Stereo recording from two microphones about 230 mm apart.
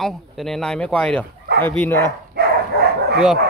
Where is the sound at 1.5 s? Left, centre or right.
Right.